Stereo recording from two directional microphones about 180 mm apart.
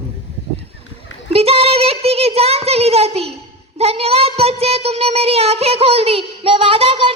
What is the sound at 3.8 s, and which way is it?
Speech, 35° right (ahead or behind).